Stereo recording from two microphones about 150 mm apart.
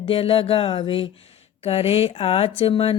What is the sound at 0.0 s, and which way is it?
Speech, 40° left (ahead or behind).